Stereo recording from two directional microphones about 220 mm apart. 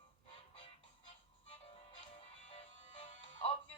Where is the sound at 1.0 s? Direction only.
25° left (ahead or behind).